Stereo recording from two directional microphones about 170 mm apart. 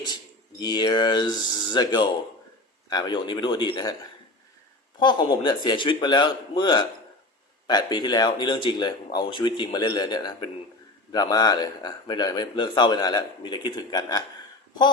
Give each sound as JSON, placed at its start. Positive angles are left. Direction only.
{"t": 0.6, "sound": "speech", "side_deg": 25}
{"t": 4.9, "sound": "speech", "side_deg": 25}